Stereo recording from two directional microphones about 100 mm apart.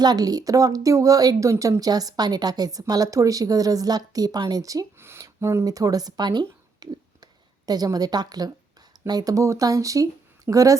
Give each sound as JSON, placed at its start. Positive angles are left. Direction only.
{"t": 0.0, "sound": "speech", "side_deg": -40}
{"t": 6.7, "sound": "a sound", "side_deg": -40}
{"t": 9.0, "sound": "speech", "side_deg": -40}